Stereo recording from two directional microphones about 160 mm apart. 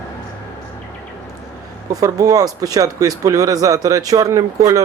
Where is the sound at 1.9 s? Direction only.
20° right (ahead or behind).